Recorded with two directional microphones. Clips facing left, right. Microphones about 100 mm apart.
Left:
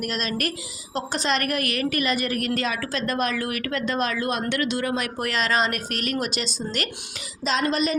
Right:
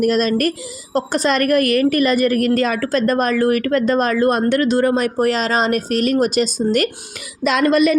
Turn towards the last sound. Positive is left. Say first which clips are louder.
# right 9 dB
turn(degrees=-55)  # may be behind; listen again after turning